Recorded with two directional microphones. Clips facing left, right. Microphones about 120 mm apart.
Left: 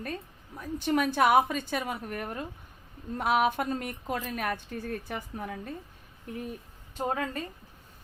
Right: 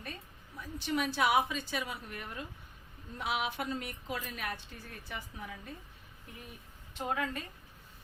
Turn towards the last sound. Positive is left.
turn(degrees=35)  # may be behind; listen again after turning